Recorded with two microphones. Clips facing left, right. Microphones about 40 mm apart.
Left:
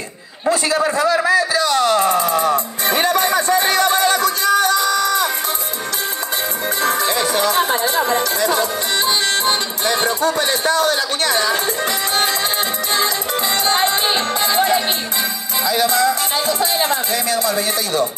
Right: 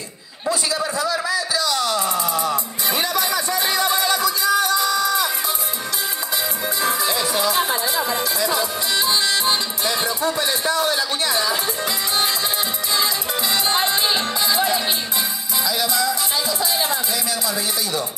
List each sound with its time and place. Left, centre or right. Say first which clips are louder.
0.5 s a sound: left 6 dB; left
6.8 s speech: left 4 dB; left
12.9 s music: left 2 dB; left
15.6 s speech: left 6 dB; left